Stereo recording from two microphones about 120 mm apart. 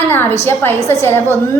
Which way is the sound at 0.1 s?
20° left (ahead or behind).